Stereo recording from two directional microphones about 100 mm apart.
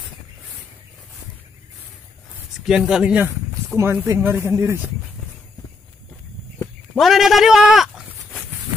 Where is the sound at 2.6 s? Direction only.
5° right (ahead or behind).